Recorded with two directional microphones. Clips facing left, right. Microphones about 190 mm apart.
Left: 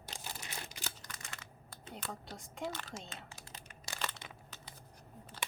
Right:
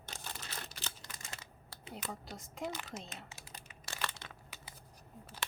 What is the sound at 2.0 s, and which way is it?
Speech, 20° right (ahead or behind).